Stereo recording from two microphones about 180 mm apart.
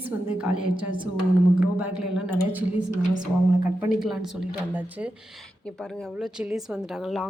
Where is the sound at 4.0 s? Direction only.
Centre (ahead or behind).